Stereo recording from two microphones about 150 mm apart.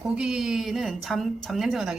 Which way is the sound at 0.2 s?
5° right (ahead or behind).